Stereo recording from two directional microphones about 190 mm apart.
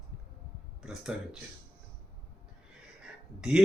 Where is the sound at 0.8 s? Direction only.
5° right (ahead or behind).